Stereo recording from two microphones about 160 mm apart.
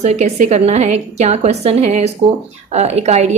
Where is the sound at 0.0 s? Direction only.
45° right (ahead or behind).